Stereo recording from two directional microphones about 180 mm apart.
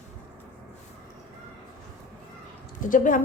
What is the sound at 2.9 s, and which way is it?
Speech, 45° left (ahead or behind).